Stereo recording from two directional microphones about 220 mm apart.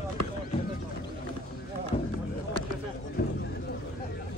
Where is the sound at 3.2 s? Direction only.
45° left (ahead or behind).